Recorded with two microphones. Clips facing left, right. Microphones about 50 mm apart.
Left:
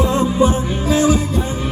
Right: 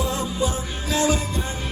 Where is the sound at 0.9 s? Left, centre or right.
Centre.